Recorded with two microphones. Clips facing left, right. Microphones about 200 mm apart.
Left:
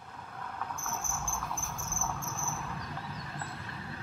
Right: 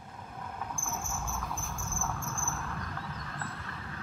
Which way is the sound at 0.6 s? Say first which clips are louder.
Even; 10° right (ahead or behind).